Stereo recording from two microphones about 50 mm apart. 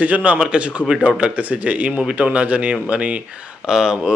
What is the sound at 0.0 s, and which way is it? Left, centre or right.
Speech, right.